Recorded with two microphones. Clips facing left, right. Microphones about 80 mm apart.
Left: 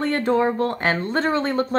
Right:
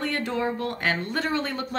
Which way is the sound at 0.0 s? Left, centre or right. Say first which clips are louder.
Left 7 dB; left.